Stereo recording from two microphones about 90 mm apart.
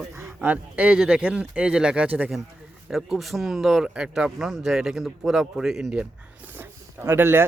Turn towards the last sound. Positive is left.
turn(degrees=-25)  # may be behind; listen again after turning